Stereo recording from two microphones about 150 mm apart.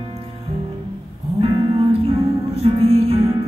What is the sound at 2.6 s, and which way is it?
Music, 40° right (ahead or behind).